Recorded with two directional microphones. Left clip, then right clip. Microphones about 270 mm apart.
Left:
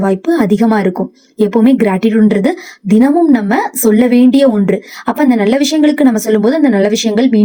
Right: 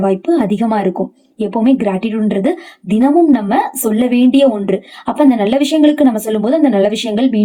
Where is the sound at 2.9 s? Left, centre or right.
Left.